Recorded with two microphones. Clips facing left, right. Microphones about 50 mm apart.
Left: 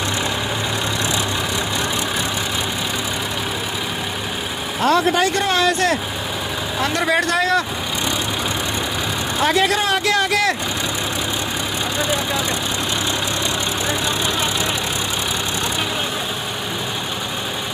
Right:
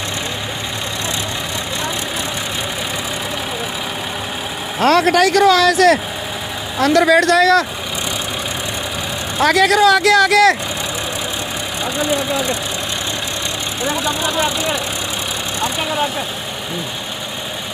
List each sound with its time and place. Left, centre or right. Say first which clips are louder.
4.7 s speech: right 4 dB; right
6.8 s speech: right 7 dB; right
9.4 s speech: right 6 dB; right